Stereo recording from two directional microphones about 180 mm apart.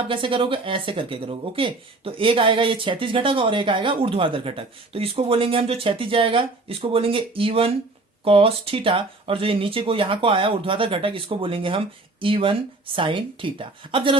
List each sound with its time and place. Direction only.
0.1 s speech: 30° right (ahead or behind)